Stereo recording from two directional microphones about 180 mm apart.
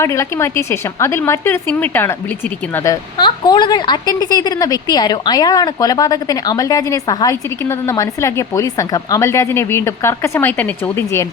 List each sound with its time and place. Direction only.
0.0 s a woman's voice: 15° left (ahead or behind)